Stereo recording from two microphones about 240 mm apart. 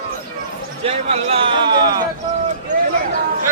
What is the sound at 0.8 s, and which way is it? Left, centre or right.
Speech, right.